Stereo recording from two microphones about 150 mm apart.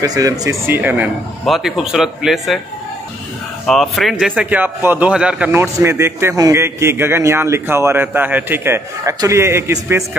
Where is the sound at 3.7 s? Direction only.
Centre (ahead or behind); by 10.2 s 15° right (ahead or behind).